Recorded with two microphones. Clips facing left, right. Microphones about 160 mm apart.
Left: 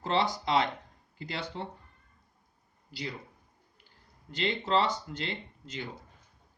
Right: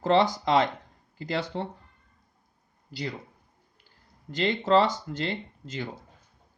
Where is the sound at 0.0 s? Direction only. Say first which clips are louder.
Right 7 dB; 40° right (ahead or behind).